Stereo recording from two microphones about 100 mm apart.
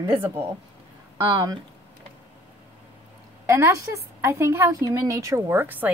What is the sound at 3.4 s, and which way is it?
A woman's voice, 30° right (ahead or behind).